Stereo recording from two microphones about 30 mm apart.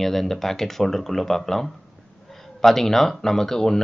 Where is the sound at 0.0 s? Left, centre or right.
Centre.